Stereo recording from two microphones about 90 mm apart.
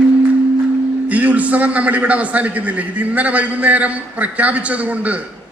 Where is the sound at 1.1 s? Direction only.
15° right (ahead or behind).